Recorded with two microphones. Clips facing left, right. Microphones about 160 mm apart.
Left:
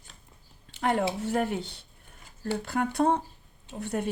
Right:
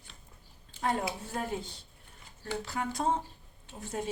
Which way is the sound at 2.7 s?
60° left (ahead or behind).